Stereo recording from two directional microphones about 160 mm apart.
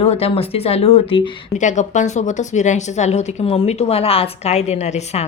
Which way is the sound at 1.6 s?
50° left (ahead or behind).